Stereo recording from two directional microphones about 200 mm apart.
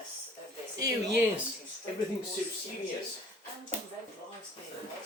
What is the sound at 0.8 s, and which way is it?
Speech, 15° right (ahead or behind).